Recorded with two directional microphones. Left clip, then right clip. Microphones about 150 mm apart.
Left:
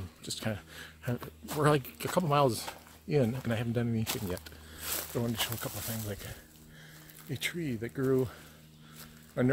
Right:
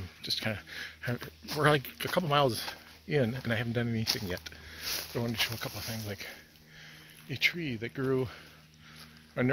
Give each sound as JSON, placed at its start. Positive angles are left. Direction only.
{"t": 0.2, "sound": "speech", "side_deg": -5}